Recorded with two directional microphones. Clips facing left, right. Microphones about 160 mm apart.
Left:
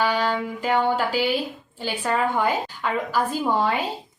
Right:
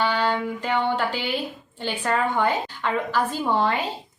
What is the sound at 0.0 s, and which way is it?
Speech, 10° left (ahead or behind).